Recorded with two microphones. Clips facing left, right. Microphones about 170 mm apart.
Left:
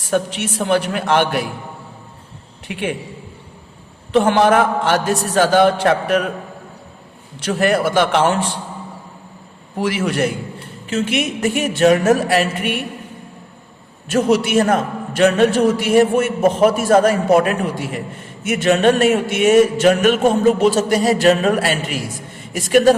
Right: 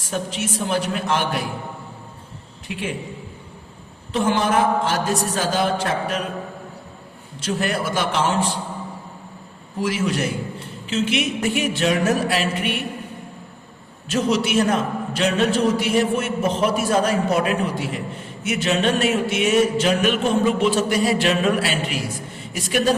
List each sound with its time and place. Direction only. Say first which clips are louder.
0.1 s a man's voice: left 6 dB; 65° left (ahead or behind)
4.1 s a man's voice: left 6 dB; 60° left (ahead or behind)
7.3 s a man's voice: left 7 dB; 60° left (ahead or behind)
9.8 s a man's voice: left 4 dB; 60° left (ahead or behind)
14.1 s a man's voice: left 5 dB; 50° left (ahead or behind)